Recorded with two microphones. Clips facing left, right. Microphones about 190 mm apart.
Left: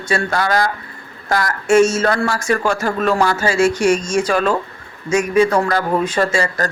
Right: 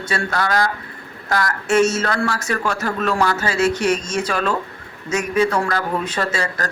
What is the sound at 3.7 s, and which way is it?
Speech, 10° left (ahead or behind).